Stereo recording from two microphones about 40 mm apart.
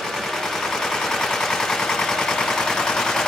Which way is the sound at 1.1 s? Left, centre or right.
Centre.